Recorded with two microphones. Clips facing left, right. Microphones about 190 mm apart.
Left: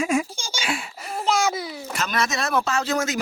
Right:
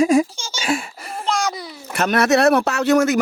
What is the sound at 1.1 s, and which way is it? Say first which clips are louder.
Babbling: even; 5° left (ahead or behind).